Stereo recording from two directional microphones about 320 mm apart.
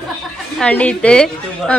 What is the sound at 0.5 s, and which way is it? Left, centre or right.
Speech, centre.